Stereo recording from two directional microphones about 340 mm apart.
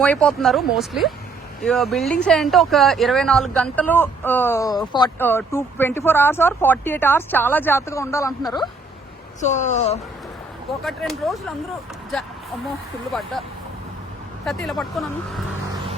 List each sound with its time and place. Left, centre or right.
0.0 s speech: centre
10.8 s speech: centre
14.4 s speech: centre